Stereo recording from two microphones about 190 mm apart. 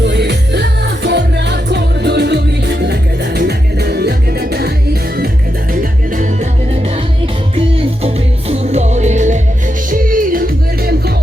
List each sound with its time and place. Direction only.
0.0 s music: 65° right (ahead or behind)
5.7 s music: 45° right (ahead or behind)
8.0 s music: 30° right (ahead or behind); by 11.1 s 55° right (ahead or behind)